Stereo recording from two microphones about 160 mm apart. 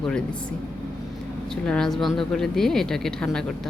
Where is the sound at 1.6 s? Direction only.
5° left (ahead or behind).